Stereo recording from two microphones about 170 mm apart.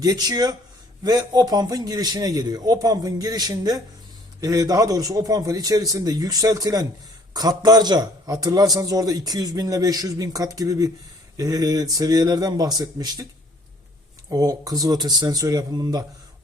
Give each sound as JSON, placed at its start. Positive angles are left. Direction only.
{"t": 0.0, "sound": "a man's voice", "side_deg": -20}
{"t": 14.3, "sound": "a man's voice", "side_deg": -20}